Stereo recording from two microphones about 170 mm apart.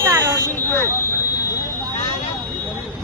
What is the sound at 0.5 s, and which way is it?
Speech, 15° left (ahead or behind).